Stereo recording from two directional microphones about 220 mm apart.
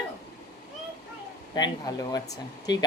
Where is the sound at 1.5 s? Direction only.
20° left (ahead or behind).